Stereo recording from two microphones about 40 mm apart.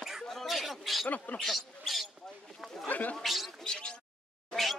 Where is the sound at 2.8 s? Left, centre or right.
Left.